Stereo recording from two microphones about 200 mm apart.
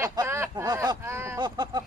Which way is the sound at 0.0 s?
15° right (ahead or behind).